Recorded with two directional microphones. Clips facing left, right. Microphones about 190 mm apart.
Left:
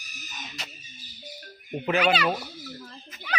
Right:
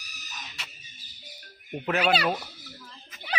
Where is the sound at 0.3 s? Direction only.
35° left (ahead or behind).